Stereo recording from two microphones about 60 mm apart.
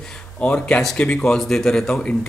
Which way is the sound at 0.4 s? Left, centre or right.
Centre.